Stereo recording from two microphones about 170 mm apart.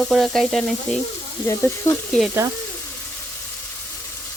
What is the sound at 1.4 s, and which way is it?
Speech, 15° left (ahead or behind).